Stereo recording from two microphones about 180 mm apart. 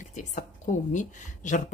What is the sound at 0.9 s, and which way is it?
Speech, 45° left (ahead or behind).